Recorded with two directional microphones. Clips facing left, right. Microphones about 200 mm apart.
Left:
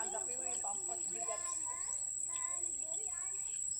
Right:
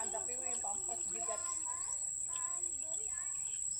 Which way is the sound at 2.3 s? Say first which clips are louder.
Even; 10° left (ahead or behind).